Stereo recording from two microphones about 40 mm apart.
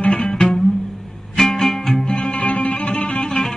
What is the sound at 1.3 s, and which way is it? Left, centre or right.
Music, centre.